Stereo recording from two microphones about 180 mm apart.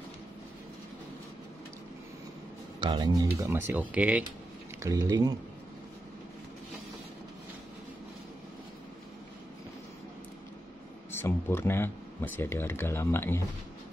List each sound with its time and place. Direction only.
2.8 s speech: 20° right (ahead or behind)
4.8 s speech: 20° right (ahead or behind)
11.1 s speech: 15° left (ahead or behind)